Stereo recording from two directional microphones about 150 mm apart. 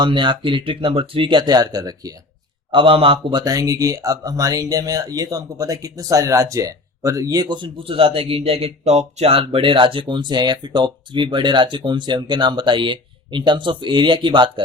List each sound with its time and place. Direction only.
0.0 s speech: 30° right (ahead or behind)
2.7 s speech: 35° right (ahead or behind)